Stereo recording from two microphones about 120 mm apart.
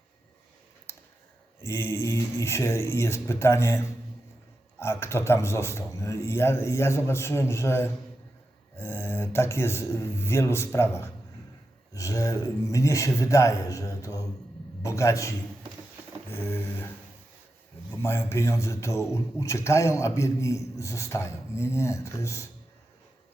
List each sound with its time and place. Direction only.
0.9 s a sound: 20° left (ahead or behind)
1.6 s a man's voice: 20° left (ahead or behind)
18.0 s a man's voice: 20° left (ahead or behind)